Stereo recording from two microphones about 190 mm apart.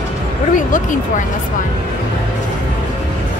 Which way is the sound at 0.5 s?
45° left (ahead or behind).